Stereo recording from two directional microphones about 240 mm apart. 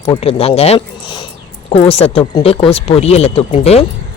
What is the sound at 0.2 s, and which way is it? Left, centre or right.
Speech, left.